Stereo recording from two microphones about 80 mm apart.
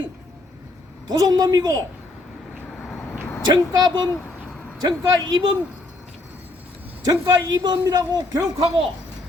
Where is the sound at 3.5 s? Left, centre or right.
Right.